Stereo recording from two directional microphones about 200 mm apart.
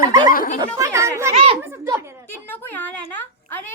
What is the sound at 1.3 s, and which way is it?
Speech, 30° right (ahead or behind).